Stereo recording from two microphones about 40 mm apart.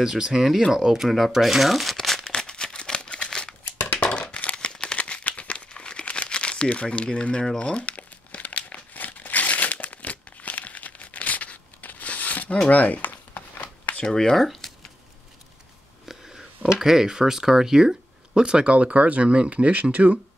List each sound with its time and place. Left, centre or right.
0.0 s speech: centre
1.0 s speech: centre
2.3 s a sound: centre
3.3 s crumpling: centre
3.9 s a sound: left
4.9 s crumpling: left
14.1 s speech: centre
16.1 s speech: centre; by 20.2 s right